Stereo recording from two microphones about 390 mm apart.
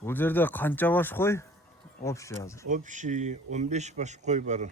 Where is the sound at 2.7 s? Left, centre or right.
Centre.